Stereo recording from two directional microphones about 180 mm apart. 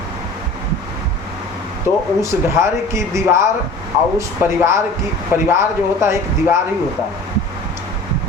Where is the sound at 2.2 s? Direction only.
15° right (ahead or behind).